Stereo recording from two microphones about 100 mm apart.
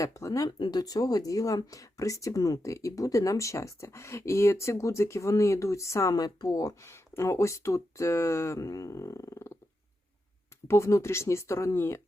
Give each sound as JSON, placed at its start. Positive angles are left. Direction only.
{"t": 0.0, "sound": "speech", "side_deg": 35}
{"t": 10.7, "sound": "speech", "side_deg": 30}